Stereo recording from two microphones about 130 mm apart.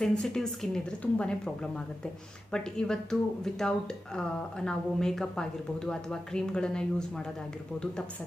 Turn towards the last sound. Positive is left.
turn(degrees=5)  # may be behind; listen again after turning